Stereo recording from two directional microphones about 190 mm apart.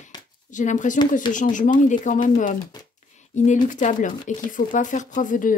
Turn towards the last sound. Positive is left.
turn(degrees=45)  # may be behind; listen again after turning